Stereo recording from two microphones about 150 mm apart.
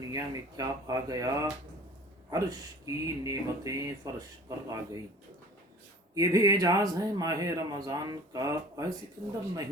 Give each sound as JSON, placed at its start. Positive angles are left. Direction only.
{"t": 0.1, "sound": "speech", "side_deg": -25}
{"t": 6.1, "sound": "speech", "side_deg": -25}